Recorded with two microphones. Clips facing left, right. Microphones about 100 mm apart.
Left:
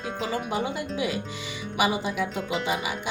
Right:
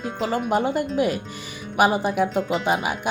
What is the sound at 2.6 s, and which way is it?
Speech, 50° right (ahead or behind).